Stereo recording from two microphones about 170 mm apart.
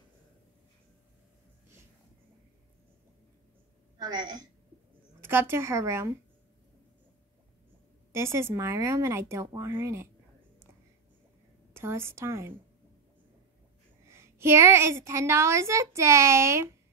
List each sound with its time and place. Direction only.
4.0 s a woman's voice: 25° right (ahead or behind)
5.2 s a woman's voice: 15° right (ahead or behind)
8.1 s a woman's voice: 15° right (ahead or behind)
11.7 s a woman's voice: 15° right (ahead or behind)
14.0 s a woman's voice: 15° right (ahead or behind)